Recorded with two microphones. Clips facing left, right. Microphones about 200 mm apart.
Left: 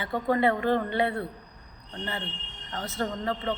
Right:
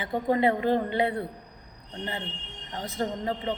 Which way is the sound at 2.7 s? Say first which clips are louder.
Right 1 dB; 15° right (ahead or behind).